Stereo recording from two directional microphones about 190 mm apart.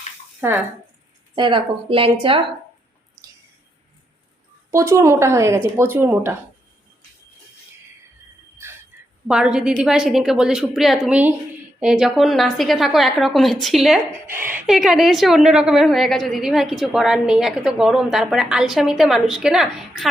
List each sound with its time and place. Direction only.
1.4 s speech: 25° right (ahead or behind)
4.7 s speech: 15° right (ahead or behind)
9.2 s a woman's voice: 5° right (ahead or behind)
14.3 s a woman's voice: 10° right (ahead or behind)